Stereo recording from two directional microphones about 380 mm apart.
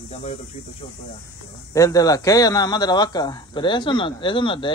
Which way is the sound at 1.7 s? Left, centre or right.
Centre.